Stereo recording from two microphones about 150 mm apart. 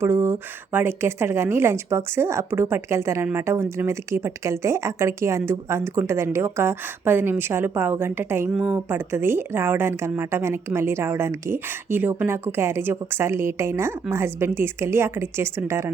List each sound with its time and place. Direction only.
0.0 s speech: 15° right (ahead or behind)